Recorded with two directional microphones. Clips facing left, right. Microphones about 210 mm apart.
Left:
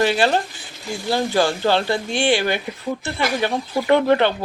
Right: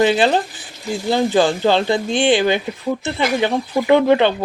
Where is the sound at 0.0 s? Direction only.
20° right (ahead or behind).